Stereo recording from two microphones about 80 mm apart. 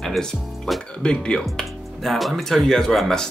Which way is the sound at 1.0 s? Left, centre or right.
Centre.